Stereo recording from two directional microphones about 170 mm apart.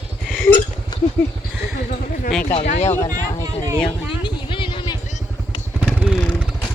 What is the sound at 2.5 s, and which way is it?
Speech, 45° left (ahead or behind).